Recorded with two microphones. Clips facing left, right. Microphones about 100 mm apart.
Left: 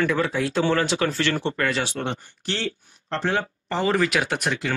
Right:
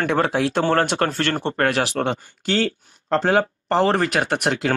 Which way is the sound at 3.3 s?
85° right.